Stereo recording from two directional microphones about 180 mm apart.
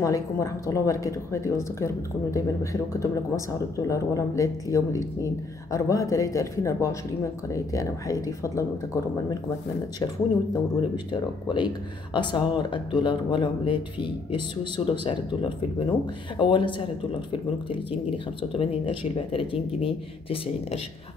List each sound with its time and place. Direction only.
0.0 s a woman's voice: 20° left (ahead or behind)
10.5 s speech: 25° left (ahead or behind)
16.3 s speech: 25° left (ahead or behind)